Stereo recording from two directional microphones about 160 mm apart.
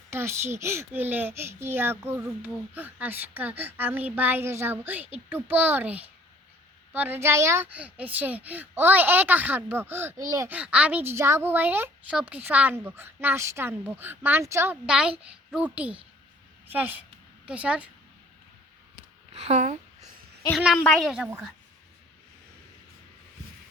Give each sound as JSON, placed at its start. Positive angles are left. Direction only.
{"t": 0.1, "sound": "a child's voice", "side_deg": -15}
{"t": 10.5, "sound": "a child's voice", "side_deg": -10}
{"t": 19.3, "sound": "speech", "side_deg": -45}
{"t": 20.7, "sound": "a woman's voice", "side_deg": 10}
{"t": 21.1, "sound": "a child's voice", "side_deg": -10}